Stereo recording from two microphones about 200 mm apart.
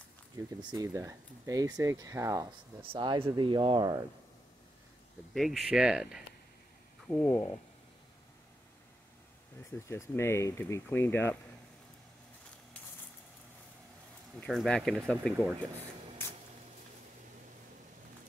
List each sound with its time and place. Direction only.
0.6 s speech: 20° right (ahead or behind)
5.3 s speech: centre (ahead or behind)
7.1 s speech: 5° left (ahead or behind)
9.7 s speech: 15° left (ahead or behind)
14.4 s speech: 5° left (ahead or behind)